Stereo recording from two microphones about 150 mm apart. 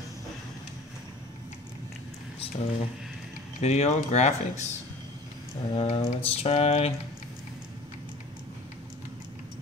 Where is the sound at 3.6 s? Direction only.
45° left (ahead or behind).